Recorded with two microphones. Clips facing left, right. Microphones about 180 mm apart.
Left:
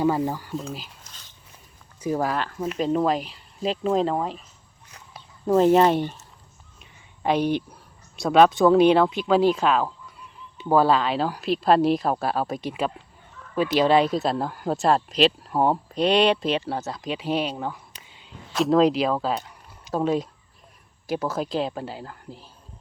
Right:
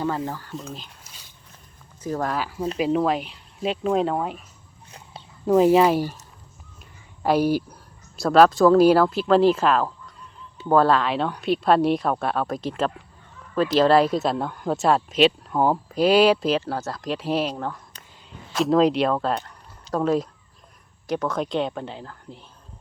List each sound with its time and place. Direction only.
0.0 s speech: 15° left (ahead or behind)
1.0 s dog: 10° right (ahead or behind)
2.0 s speech: 10° left (ahead or behind)
2.3 s speech: 5° right (ahead or behind)
4.9 s a sound: 25° right (ahead or behind)
5.5 s speech: 5° right (ahead or behind)
7.2 s speech: 5° right (ahead or behind)
21.1 s speech: 5° left (ahead or behind)